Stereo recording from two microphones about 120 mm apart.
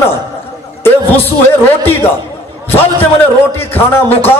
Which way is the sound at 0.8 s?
15° left (ahead or behind).